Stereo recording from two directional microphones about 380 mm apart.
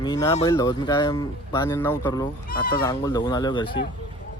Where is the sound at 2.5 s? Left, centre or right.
Left.